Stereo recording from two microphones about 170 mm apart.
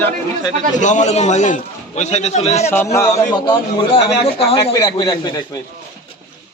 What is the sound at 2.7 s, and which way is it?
A man's voice, 15° left (ahead or behind).